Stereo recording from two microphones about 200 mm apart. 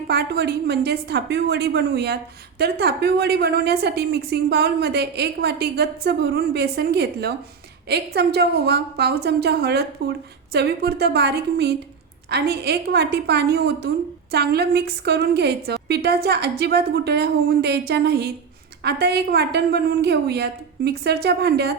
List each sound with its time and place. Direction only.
0.1 s a woman's voice: 55° right (ahead or behind)